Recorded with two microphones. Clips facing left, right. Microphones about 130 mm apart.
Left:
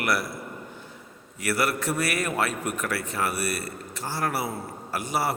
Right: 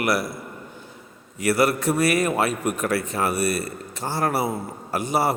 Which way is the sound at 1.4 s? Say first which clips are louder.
Right 6 dB; 20° right (ahead or behind).